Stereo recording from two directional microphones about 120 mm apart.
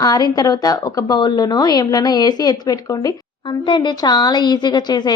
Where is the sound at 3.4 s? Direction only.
40° left (ahead or behind).